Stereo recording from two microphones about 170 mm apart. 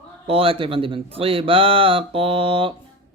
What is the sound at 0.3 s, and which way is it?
Speech, 35° right (ahead or behind).